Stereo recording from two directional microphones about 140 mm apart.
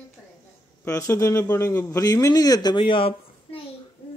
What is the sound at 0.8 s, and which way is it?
A man's voice, 20° left (ahead or behind).